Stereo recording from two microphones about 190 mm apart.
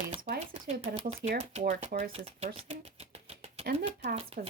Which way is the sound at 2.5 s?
30° right (ahead or behind).